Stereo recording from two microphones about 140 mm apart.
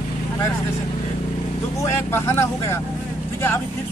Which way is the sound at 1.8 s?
20° left (ahead or behind).